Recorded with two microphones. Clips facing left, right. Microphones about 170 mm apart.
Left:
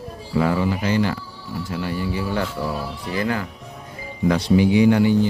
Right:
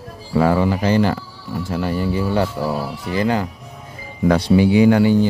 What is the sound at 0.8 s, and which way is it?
Speech, 35° right (ahead or behind).